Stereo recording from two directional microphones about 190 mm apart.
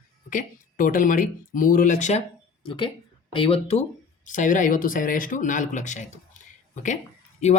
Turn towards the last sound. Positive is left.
turn(degrees=35)  # may be behind; listen again after turning